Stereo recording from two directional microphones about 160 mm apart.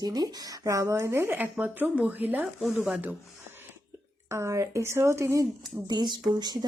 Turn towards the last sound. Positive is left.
turn(degrees=-25)  # may be behind; listen again after turning